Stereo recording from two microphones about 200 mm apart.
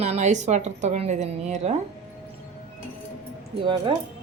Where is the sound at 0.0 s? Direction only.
35° right (ahead or behind).